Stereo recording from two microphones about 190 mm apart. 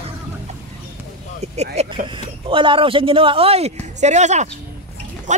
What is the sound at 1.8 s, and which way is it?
A man's voice, 35° right (ahead or behind).